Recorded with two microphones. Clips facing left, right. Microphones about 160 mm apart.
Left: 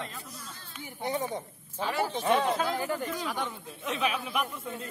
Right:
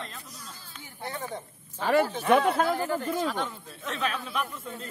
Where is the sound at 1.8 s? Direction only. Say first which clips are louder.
Right 7 dB; 55° right (ahead or behind).